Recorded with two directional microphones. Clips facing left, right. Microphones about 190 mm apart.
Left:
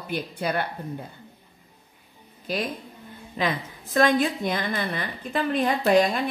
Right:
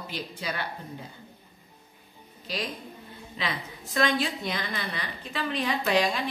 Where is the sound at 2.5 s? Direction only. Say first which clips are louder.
Left 5 dB; 55° left (ahead or behind).